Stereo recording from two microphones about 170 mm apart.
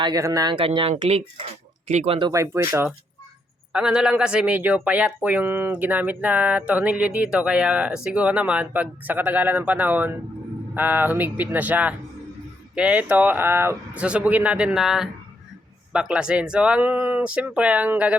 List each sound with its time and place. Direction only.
0.0 s speech: 20° right (ahead or behind)
2.3 s speech: 15° right (ahead or behind)